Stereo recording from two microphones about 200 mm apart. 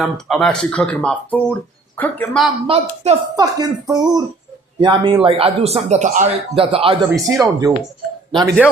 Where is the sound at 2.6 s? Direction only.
30° right (ahead or behind).